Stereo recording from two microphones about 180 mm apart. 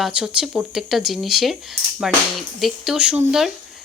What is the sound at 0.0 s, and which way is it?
Speech, 5° right (ahead or behind).